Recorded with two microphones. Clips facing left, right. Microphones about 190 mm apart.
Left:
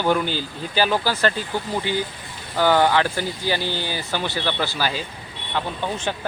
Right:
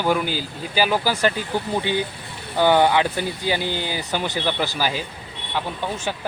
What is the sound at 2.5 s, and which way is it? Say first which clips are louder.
Speech: right 1 dB; 15° right (ahead or behind).